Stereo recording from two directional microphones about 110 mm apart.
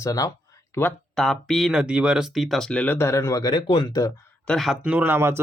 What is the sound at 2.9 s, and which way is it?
Speech, 25° left (ahead or behind).